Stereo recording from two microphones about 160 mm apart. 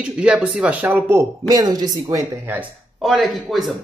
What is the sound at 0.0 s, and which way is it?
Speech, 5° right (ahead or behind).